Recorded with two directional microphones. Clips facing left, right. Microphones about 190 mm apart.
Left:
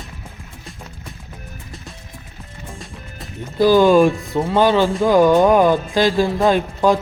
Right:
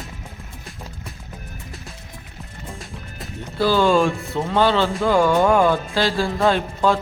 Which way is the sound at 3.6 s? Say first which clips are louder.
Left 5 dB; 15° left (ahead or behind).